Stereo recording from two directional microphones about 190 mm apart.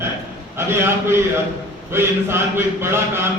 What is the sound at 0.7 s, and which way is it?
Mantra, 15° right (ahead or behind).